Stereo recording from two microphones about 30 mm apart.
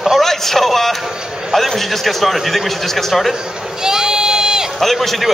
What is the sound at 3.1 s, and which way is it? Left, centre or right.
Speech, centre.